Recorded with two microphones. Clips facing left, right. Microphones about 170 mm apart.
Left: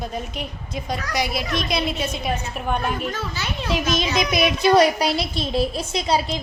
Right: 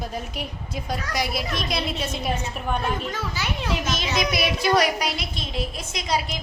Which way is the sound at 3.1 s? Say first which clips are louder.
Left 1 dB; 10° right (ahead or behind).